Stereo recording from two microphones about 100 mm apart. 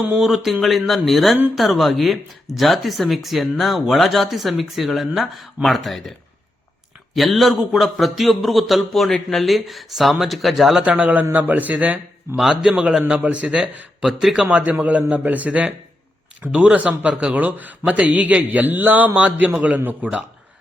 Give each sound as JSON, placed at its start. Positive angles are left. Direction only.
{"t": 0.2, "sound": "a man's voice", "side_deg": -5}
{"t": 10.9, "sound": "speech", "side_deg": -15}
{"t": 12.4, "sound": "a man's voice", "side_deg": -5}
{"t": 14.4, "sound": "speech", "side_deg": -15}